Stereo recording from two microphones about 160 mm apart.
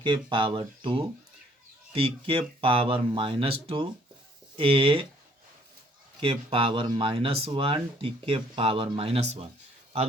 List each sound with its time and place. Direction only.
0.0 s speech: 30° right (ahead or behind)
6.1 s speech: 35° right (ahead or behind)